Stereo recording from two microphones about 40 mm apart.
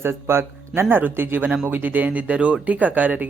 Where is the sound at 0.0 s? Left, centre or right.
Right.